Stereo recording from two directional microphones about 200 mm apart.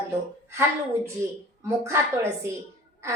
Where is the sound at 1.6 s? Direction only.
15° right (ahead or behind).